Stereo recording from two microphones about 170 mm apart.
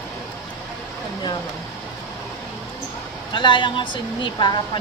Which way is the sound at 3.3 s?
30° left (ahead or behind).